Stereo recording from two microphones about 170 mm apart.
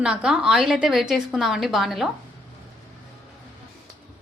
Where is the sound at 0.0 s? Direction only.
5° right (ahead or behind).